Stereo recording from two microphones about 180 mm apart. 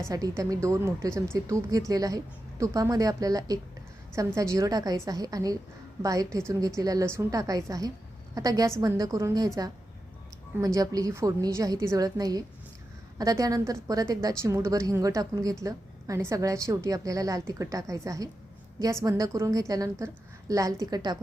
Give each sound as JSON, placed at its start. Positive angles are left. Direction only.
{"t": 0.1, "sound": "a woman's voice", "side_deg": -20}
{"t": 10.8, "sound": "a woman's voice", "side_deg": -20}